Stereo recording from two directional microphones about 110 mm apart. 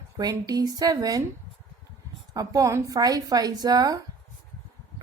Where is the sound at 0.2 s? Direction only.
35° right (ahead or behind).